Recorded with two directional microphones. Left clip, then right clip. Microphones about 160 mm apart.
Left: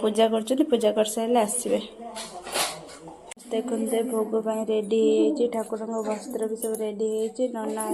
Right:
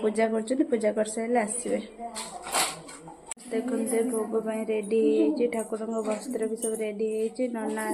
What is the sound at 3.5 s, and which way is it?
Music, 25° left (ahead or behind).